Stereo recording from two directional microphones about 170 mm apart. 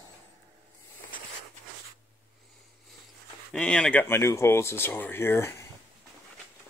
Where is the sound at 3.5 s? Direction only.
5° left (ahead or behind).